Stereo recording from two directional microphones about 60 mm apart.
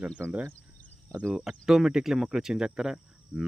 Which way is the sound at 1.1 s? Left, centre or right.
Centre.